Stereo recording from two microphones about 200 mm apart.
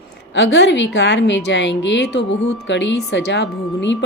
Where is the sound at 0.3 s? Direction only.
65° left (ahead or behind).